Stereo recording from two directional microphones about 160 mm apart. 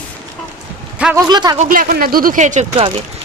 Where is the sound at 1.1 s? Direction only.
25° right (ahead or behind).